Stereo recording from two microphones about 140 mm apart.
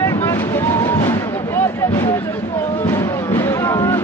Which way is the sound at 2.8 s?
15° left (ahead or behind).